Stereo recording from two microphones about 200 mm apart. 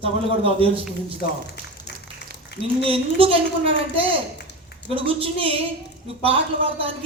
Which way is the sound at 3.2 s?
25° right (ahead or behind).